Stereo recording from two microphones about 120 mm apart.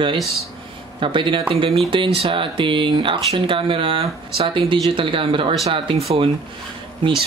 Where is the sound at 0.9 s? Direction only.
45° right (ahead or behind).